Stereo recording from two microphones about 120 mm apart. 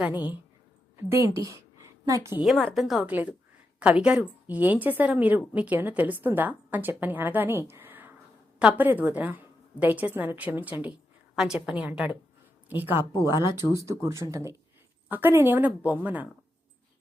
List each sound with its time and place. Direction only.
0.0 s a woman's voice: 15° right (ahead or behind)
0.9 s speech: 25° right (ahead or behind)
1.5 s a sound: 30° right (ahead or behind)
2.4 s a woman's voice: centre (ahead or behind)
3.1 s a woman's voice: 15° right (ahead or behind)
13.1 s speech: 35° left (ahead or behind)
14.0 s a woman's voice: 25° right (ahead or behind)